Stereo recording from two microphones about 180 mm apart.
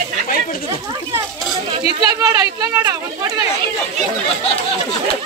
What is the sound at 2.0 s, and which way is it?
Speech, 20° right (ahead or behind).